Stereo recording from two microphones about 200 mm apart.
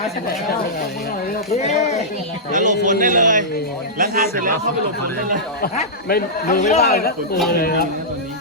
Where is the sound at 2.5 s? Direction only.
40° right (ahead or behind).